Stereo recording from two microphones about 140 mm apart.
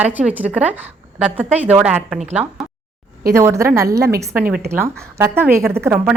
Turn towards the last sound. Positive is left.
turn(degrees=-10)  # may be behind; listen again after turning